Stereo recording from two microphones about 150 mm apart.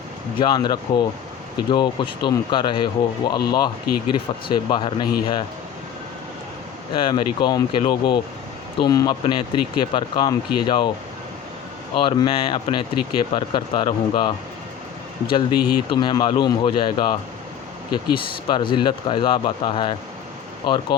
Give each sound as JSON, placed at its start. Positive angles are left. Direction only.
{"t": 0.3, "sound": "speech", "side_deg": 30}
{"t": 6.9, "sound": "speech", "side_deg": 35}
{"t": 11.9, "sound": "speech", "side_deg": 30}